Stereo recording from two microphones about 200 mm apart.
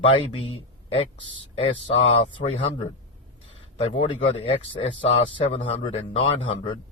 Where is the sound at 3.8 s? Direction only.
30° left (ahead or behind).